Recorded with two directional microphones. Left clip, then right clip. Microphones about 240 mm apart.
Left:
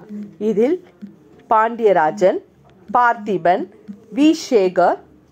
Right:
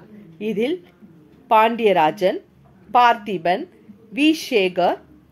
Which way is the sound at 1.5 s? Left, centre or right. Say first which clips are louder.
Left 1 dB; centre.